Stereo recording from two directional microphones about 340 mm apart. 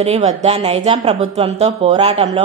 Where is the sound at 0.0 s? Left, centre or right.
Centre.